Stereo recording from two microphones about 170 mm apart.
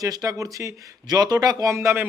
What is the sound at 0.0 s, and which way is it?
A man's voice, 20° right (ahead or behind).